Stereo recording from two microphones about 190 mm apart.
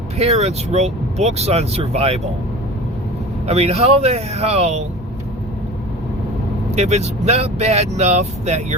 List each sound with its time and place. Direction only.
0.2 s speech: 35° right (ahead or behind)
3.4 s speech: 35° right (ahead or behind)
6.7 s speech: 35° right (ahead or behind)